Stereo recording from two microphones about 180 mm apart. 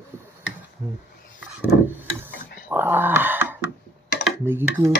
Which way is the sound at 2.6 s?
10° right (ahead or behind).